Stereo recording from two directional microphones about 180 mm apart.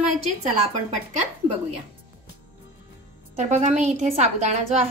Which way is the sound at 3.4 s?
40° right (ahead or behind).